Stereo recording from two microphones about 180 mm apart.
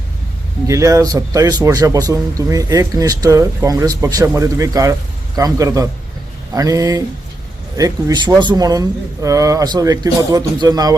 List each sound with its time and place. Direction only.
0.7 s a man's voice: 15° right (ahead or behind)